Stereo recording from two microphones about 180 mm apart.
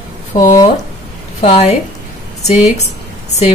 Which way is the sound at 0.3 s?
40° left (ahead or behind).